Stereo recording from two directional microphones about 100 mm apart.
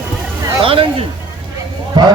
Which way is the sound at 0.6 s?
65° right (ahead or behind).